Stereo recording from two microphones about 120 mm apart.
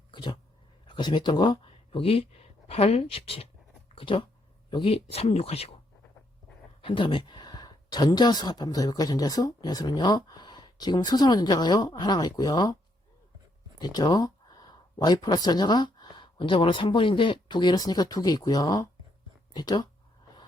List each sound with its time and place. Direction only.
0.1 s dog: 40° left (ahead or behind)
0.9 s speech: 40° left (ahead or behind); by 5.7 s 60° left (ahead or behind)
6.8 s speech: 45° left (ahead or behind)
13.7 s speech: 35° left (ahead or behind)